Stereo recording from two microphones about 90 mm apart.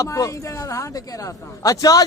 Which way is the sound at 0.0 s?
35° left (ahead or behind).